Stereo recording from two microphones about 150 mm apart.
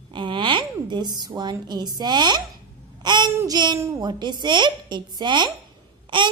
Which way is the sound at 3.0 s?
30° right (ahead or behind).